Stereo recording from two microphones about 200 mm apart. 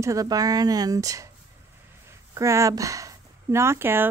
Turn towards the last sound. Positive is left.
turn(degrees=-10)  # may be behind; listen again after turning